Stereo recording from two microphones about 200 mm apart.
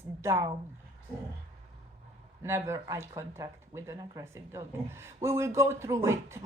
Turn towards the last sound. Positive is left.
turn(degrees=-15)  # may be behind; listen again after turning